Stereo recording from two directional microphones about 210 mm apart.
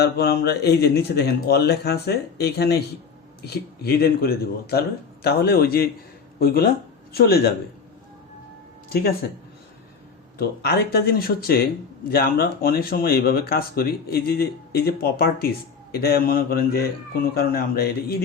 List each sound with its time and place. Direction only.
0.0 s speech: 50° left (ahead or behind)
10.3 s speech: 50° left (ahead or behind)